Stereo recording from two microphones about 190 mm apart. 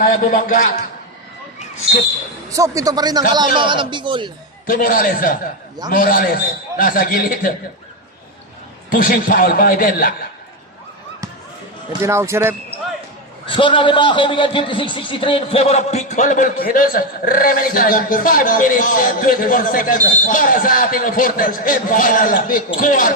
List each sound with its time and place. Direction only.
0.0 s a man's voice: 45° left (ahead or behind)
2.5 s a man's voice: 15° right (ahead or behind)
4.6 s a man's voice: 45° left (ahead or behind)
8.9 s a man's voice: 50° left (ahead or behind)
12.0 s speech: 15° right (ahead or behind)
13.5 s a man's voice: 25° left (ahead or behind); by 23.1 s 45° left (ahead or behind)